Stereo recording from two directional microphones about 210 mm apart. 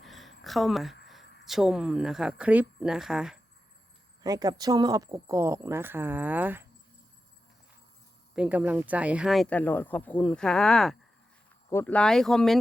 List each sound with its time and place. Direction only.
0.0 s a sound: centre (ahead or behind)
0.4 s a woman's voice: centre (ahead or behind)
1.2 s a sound: 55° left (ahead or behind)
1.5 s speech: centre (ahead or behind)
4.2 s speech: 20° right (ahead or behind)
8.4 s speech: 5° right (ahead or behind)